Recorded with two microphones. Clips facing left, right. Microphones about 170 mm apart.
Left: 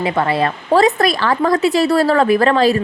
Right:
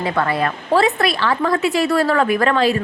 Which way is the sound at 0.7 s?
40° left (ahead or behind).